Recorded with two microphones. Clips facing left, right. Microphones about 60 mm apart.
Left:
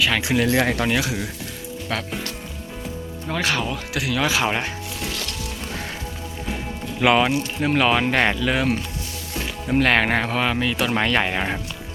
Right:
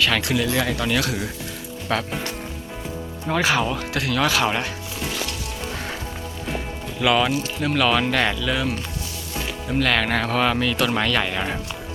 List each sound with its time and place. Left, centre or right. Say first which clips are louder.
0.0 s speech: even; centre
0.6 s speech: left 3 dB; left
0.9 s speech: even; centre
1.9 s speech: right 3 dB; centre
3.2 s speech: right 3 dB; centre
7.0 s speech: left 2 dB; left
9.7 s speech: left 3 dB; left
10.2 s speech: right 1 dB; centre